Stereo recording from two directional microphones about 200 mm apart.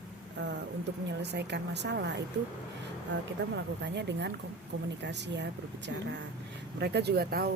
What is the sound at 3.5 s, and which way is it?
Speech, 60° right (ahead or behind).